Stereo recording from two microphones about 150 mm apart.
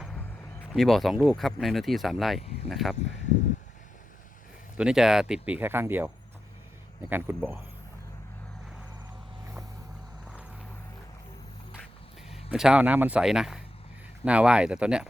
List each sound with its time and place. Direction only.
0.7 s speech: centre (ahead or behind)
4.8 s speech: 5° right (ahead or behind)
7.1 s speech: 15° right (ahead or behind)
12.5 s speech: 5° right (ahead or behind)